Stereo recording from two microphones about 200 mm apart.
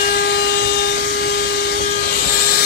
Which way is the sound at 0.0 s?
50° left (ahead or behind).